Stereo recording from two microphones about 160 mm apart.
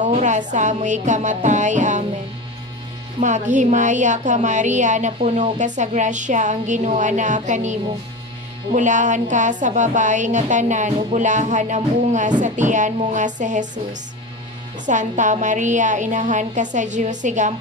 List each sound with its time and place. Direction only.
0.0 s a woman's voice: 50° right (ahead or behind)
3.2 s a woman's voice: 50° right (ahead or behind)
8.7 s a woman's voice: 50° right (ahead or behind)
14.9 s a woman's voice: 50° right (ahead or behind)